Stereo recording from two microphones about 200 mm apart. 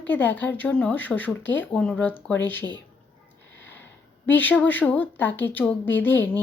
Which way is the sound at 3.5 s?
65° left (ahead or behind).